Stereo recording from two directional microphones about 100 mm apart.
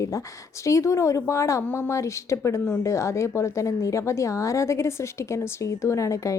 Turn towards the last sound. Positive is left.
turn(degrees=30)  # may be behind; listen again after turning